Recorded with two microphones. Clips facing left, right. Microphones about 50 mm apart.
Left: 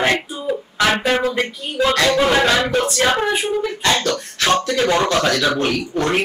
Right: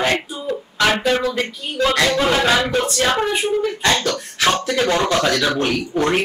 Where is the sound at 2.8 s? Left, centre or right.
Left.